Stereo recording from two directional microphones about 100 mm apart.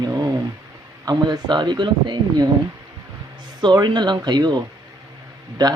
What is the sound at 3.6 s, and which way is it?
Speech, 45° right (ahead or behind).